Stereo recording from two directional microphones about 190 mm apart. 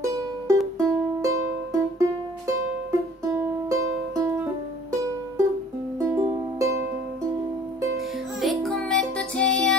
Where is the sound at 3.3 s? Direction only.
15° right (ahead or behind).